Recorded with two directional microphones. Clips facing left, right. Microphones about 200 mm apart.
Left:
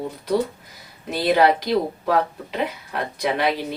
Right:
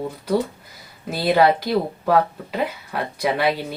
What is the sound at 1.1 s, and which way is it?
Speech, 5° right (ahead or behind).